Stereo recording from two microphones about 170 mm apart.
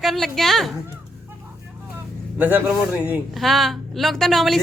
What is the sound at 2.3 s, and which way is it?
A man's voice, 10° right (ahead or behind).